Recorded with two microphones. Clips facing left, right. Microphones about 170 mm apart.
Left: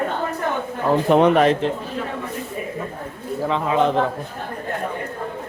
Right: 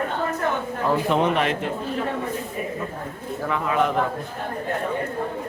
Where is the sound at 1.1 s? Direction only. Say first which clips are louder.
Left 10 dB; 50° left (ahead or behind).